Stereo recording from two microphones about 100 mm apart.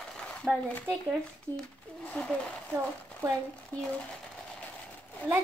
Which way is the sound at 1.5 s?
30° right (ahead or behind).